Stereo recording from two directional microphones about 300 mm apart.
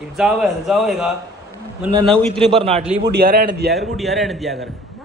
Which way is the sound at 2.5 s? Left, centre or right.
Centre.